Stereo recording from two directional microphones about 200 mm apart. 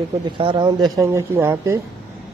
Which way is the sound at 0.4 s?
25° right (ahead or behind).